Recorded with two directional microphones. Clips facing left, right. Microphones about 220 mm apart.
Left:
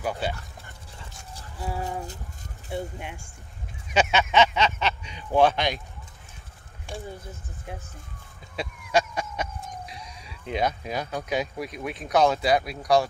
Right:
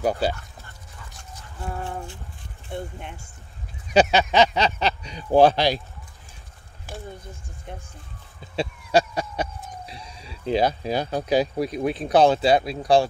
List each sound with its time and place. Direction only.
0.0 s speech: 40° right (ahead or behind)
1.6 s speech: 5° left (ahead or behind)
3.9 s speech: 35° right (ahead or behind)
6.9 s speech: 5° right (ahead or behind)
8.5 s a sound: 35° right (ahead or behind)
9.8 s speech: 30° right (ahead or behind)